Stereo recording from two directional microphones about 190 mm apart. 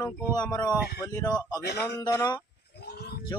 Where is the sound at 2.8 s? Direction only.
60° left (ahead or behind).